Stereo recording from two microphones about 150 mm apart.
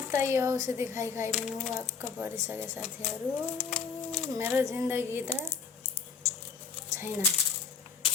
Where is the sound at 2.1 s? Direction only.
15° right (ahead or behind).